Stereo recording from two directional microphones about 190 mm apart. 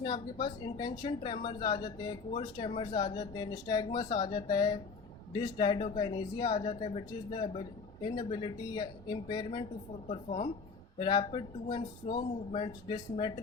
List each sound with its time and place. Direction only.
0.0 s a woman's voice: 25° left (ahead or behind)